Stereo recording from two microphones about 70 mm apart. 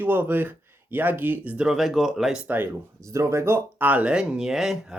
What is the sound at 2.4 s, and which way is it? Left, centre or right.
Speech, right.